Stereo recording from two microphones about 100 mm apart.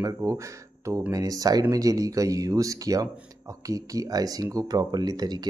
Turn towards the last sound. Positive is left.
turn(degrees=-45)  # may be behind; listen again after turning